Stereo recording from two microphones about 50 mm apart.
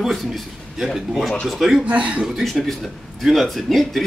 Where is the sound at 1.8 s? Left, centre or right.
Right.